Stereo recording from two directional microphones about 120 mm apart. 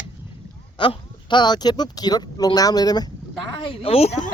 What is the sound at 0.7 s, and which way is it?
Speech, 40° left (ahead or behind).